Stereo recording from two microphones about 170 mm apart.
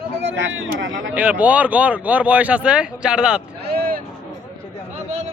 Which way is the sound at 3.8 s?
60° right (ahead or behind).